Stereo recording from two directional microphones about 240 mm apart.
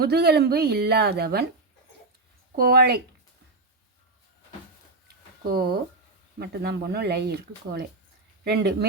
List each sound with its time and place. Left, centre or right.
0.0 s speech: right
2.6 s speech: right
5.4 s speech: right